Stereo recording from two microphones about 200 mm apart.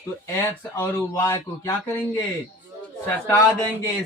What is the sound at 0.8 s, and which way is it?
Speech, 15° left (ahead or behind).